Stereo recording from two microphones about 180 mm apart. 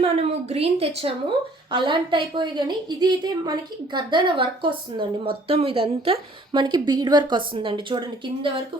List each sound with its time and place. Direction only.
0.0 s a woman's voice: 35° right (ahead or behind)